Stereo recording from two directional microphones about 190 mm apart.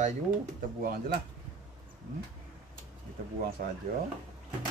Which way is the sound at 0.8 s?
50° right (ahead or behind).